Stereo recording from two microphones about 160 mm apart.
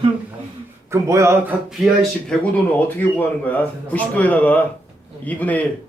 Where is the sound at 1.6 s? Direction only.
Centre (ahead or behind).